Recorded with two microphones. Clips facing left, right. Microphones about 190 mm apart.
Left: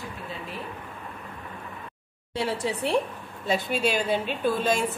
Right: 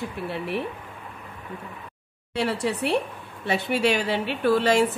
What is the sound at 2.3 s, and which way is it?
A woman's voice, 65° right (ahead or behind).